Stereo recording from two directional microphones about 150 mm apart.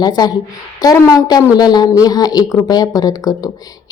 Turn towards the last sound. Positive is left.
turn(degrees=25)  # may be behind; listen again after turning